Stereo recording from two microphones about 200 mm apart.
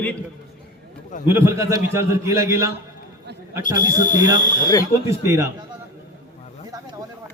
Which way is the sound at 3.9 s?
40° left (ahead or behind).